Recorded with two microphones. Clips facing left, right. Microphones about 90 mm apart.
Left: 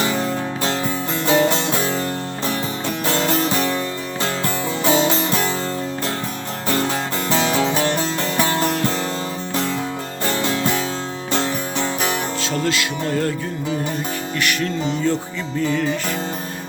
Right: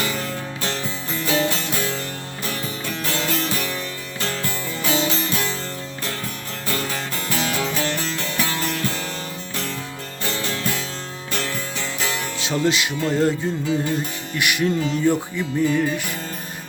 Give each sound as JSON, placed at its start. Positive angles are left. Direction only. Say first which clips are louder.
{"t": 0.0, "sound": "music", "louder": "left 5 dB", "side_deg": 25}
{"t": 6.7, "sound": "music", "louder": "left 6 dB", "side_deg": 25}
{"t": 10.4, "sound": "music", "louder": "left 7 dB", "side_deg": 25}
{"t": 12.6, "sound": "speech", "louder": "right 3 dB", "side_deg": -20}
{"t": 13.1, "sound": "music", "louder": "right 3 dB", "side_deg": -20}
{"t": 14.3, "sound": "music", "louder": "right 3 dB", "side_deg": -15}